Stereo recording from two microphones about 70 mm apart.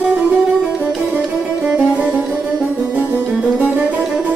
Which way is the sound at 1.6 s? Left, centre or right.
Centre.